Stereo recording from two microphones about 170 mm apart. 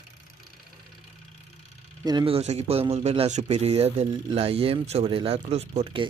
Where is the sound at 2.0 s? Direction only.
30° right (ahead or behind).